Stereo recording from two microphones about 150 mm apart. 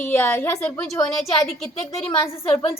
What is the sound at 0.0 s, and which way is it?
Speech, 15° left (ahead or behind).